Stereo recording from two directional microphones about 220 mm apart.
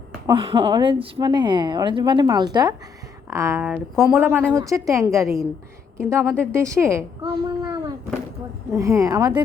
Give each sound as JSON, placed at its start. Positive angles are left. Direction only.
{"t": 0.3, "sound": "a woman's voice", "side_deg": -20}